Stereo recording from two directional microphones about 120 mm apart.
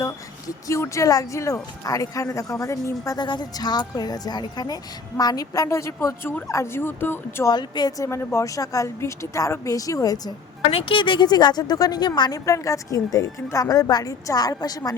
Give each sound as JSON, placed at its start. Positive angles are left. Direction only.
{"t": 0.0, "sound": "a woman's voice", "side_deg": 25}
{"t": 7.4, "sound": "a woman's voice", "side_deg": 35}
{"t": 10.7, "sound": "a woman's voice", "side_deg": 55}